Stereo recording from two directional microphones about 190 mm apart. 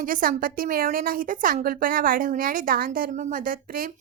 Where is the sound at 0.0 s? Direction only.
45° right (ahead or behind).